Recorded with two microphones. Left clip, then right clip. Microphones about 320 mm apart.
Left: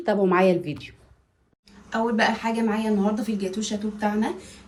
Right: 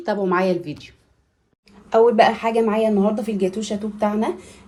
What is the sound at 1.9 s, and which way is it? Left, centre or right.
A woman's voice, centre.